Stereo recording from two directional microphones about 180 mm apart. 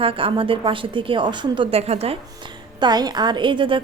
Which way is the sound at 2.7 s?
25° right (ahead or behind).